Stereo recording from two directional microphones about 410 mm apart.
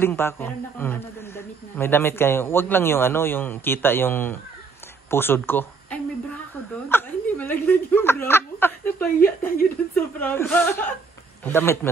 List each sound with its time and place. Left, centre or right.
0.0 s a man's voice: centre
6.9 s chuckle: centre
9.9 s a man's voice: centre